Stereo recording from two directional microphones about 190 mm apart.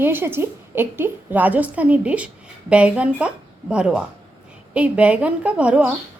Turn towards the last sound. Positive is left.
turn(degrees=-5)  # may be behind; listen again after turning